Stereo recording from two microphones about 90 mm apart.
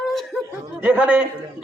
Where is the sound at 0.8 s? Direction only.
15° right (ahead or behind).